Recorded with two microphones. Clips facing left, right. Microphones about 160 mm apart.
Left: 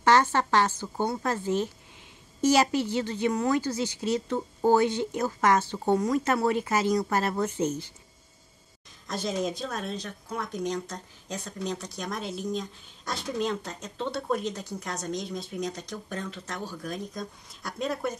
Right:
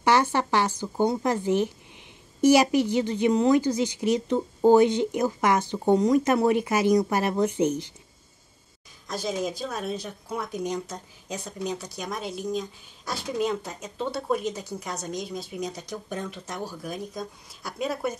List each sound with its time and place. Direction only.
0.0 s a woman's voice: 15° right (ahead or behind)
9.0 s speech: centre (ahead or behind)